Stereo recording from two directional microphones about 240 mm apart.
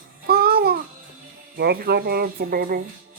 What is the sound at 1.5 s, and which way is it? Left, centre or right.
A child's voice, right.